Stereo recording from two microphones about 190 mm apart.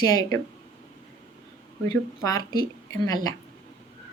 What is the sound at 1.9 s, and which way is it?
A woman's voice, 20° left (ahead or behind).